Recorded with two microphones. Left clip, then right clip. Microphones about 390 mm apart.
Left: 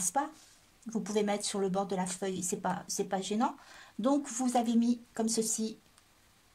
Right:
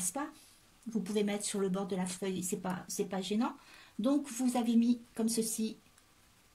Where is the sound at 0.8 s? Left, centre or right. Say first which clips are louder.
Left 3 dB; centre.